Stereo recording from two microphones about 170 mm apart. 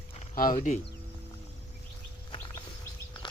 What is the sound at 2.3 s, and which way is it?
Bird, 25° left (ahead or behind).